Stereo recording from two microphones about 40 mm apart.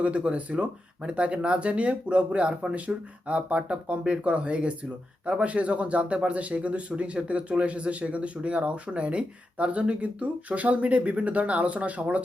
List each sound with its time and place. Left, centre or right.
0.3 s a man's voice: right